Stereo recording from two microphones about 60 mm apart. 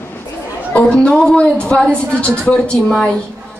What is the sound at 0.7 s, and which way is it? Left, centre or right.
A woman's voice, centre.